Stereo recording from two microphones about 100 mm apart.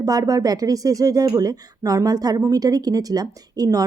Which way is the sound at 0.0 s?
35° right (ahead or behind).